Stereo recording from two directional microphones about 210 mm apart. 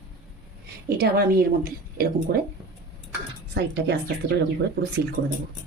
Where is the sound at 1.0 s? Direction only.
45° right (ahead or behind).